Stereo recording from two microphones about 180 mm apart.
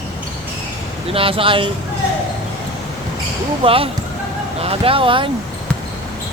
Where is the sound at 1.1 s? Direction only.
30° right (ahead or behind).